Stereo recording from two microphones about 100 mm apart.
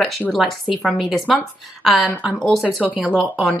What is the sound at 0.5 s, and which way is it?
Speech, centre (ahead or behind).